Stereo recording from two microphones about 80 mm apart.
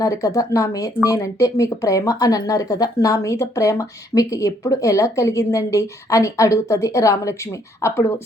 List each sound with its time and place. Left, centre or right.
0.0 s speech: left